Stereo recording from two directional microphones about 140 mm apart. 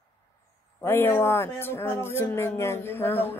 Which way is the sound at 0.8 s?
15° left (ahead or behind).